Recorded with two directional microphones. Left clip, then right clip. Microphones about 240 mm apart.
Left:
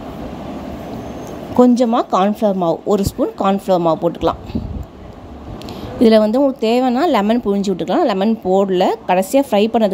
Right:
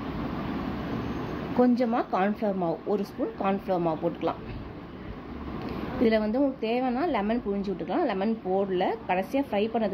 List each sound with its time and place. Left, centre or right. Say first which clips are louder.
1.6 s speech: left 12 dB; left
6.0 s speech: left 13 dB; left